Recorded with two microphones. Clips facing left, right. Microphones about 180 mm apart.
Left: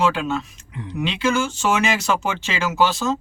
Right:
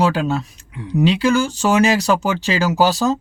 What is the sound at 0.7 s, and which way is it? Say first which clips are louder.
Speech: right 1 dB; 10° right (ahead or behind).